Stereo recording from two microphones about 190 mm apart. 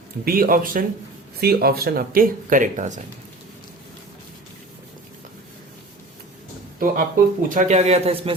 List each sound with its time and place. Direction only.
0.3 s speech: 50° right (ahead or behind)
6.7 s a man's voice: 50° right (ahead or behind); by 8.3 s 30° right (ahead or behind)